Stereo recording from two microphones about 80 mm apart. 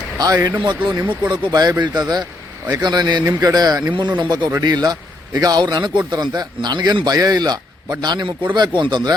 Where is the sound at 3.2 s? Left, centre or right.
Right.